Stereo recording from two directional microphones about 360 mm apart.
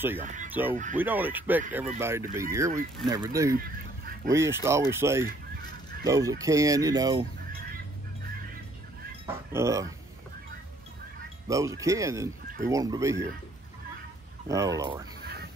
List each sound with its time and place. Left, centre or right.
0.2 s speech: right
0.5 s speech: centre
5.2 s goose: centre
6.0 s speech: centre
9.2 s speech: centre
11.4 s speech: centre
14.5 s speech: centre